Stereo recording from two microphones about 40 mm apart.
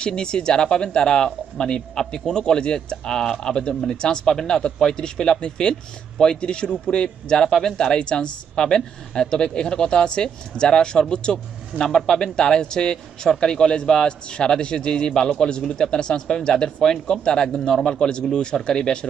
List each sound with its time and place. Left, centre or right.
0.0 s a man's voice: left